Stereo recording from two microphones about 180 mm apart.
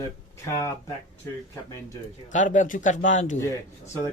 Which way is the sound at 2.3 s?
45° left (ahead or behind).